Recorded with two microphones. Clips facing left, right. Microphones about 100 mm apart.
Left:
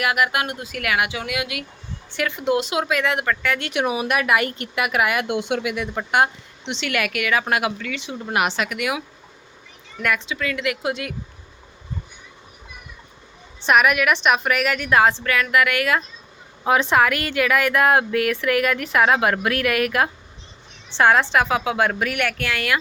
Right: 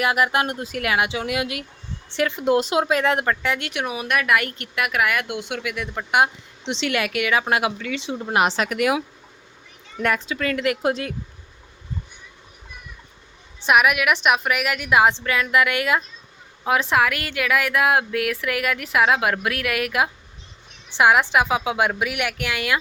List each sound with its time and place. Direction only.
0.0 s speech: 30° right (ahead or behind)
3.7 s speech: 5° left (ahead or behind)
5.3 s speech: 20° left (ahead or behind)
5.7 s speech: 5° left (ahead or behind)
6.1 s a woman's voice: 10° right (ahead or behind)
6.7 s speech: 30° right (ahead or behind)
13.6 s a woman's voice: 5° right (ahead or behind); by 16.0 s 20° right (ahead or behind)
16.6 s a woman's voice: centre (ahead or behind)